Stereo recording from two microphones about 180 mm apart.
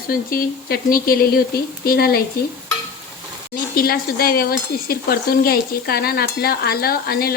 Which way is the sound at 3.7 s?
55° left (ahead or behind).